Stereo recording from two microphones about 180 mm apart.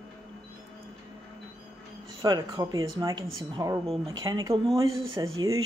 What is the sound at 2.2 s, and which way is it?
Speech, 20° right (ahead or behind).